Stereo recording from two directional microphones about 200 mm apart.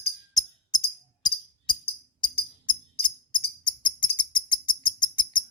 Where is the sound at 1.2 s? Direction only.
20° left (ahead or behind).